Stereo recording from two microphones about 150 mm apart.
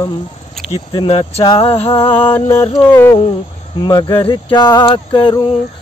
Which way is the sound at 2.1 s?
15° left (ahead or behind).